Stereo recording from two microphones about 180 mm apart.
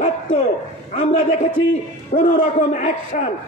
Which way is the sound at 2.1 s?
45° left (ahead or behind).